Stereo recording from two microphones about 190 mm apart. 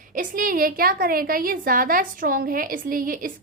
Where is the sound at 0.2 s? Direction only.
45° right (ahead or behind).